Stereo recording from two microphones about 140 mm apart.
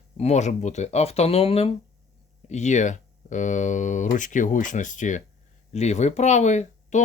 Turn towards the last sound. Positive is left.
turn(degrees=55)  # may be behind; listen again after turning